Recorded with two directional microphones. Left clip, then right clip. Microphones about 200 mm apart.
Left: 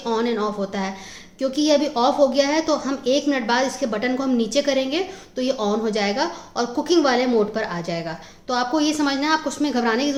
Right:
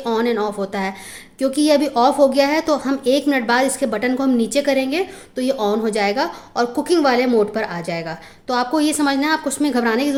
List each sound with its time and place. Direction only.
0.0 s a woman's voice: 20° right (ahead or behind)